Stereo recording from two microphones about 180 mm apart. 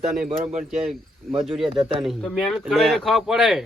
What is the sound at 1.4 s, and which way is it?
Speech, centre (ahead or behind).